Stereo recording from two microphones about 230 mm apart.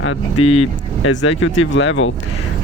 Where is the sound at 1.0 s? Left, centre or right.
Left.